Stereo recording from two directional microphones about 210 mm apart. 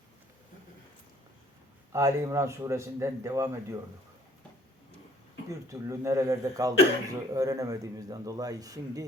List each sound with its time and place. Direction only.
1.9 s a man's voice: 15° right (ahead or behind)
5.5 s a man's voice: 15° right (ahead or behind)